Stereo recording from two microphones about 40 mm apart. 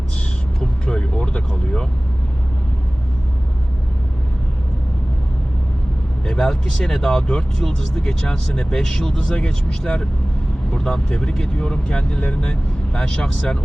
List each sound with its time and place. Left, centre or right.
0.6 s music: centre
6.2 s speech: centre
12.2 s speech: left